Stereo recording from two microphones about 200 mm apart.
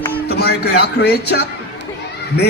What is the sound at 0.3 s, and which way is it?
A man's voice, 55° left (ahead or behind).